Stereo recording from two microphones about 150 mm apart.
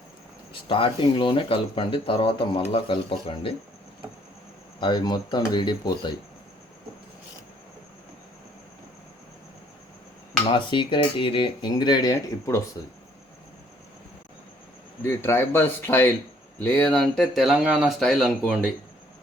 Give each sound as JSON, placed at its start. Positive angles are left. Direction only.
{"t": 0.7, "sound": "speech", "side_deg": 35}
{"t": 4.8, "sound": "speech", "side_deg": 30}
{"t": 10.4, "sound": "speech", "side_deg": 35}
{"t": 15.0, "sound": "speech", "side_deg": 15}